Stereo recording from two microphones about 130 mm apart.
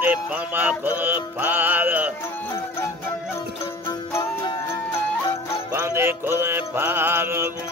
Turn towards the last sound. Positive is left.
turn(degrees=-15)  # may be behind; listen again after turning